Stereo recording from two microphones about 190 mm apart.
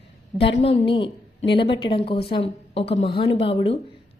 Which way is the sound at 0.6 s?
30° left (ahead or behind).